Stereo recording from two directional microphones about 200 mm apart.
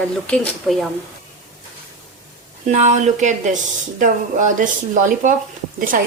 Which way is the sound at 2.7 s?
35° right (ahead or behind).